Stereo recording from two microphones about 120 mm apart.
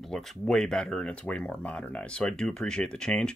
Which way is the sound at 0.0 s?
Centre (ahead or behind).